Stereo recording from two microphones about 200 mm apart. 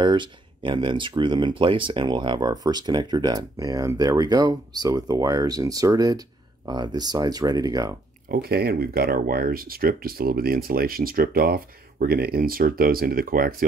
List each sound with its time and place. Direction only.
0.0 s speech: 25° right (ahead or behind)
8.3 s speech: 50° right (ahead or behind)